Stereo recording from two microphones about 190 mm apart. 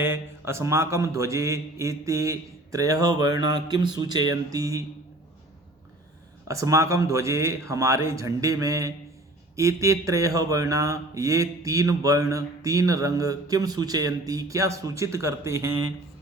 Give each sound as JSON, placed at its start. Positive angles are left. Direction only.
{"t": 0.0, "sound": "speech", "side_deg": -10}
{"t": 3.2, "sound": "a sound", "side_deg": -20}
{"t": 4.4, "sound": "speech", "side_deg": -15}
{"t": 6.5, "sound": "speech", "side_deg": -15}